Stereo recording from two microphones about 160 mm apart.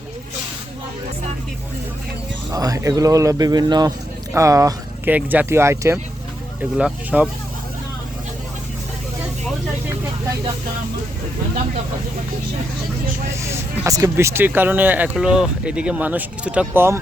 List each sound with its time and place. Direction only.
2.5 s speech: 20° right (ahead or behind)
13.3 s speech: 15° right (ahead or behind)